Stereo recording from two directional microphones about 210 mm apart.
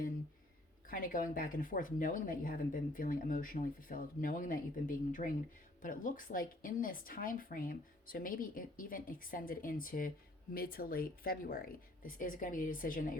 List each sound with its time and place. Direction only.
0.9 s speech: 40° left (ahead or behind)